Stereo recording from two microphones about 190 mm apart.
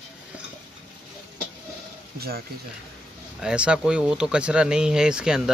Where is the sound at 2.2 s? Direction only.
50° right (ahead or behind).